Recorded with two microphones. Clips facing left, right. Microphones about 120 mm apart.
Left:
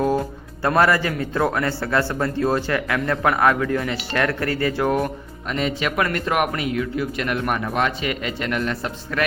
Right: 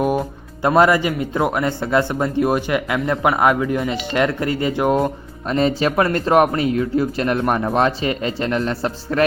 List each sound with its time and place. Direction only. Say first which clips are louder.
0.0 s speech: right 1 dB; 15° right (ahead or behind)
5.5 s speech: right 6 dB; 35° right (ahead or behind)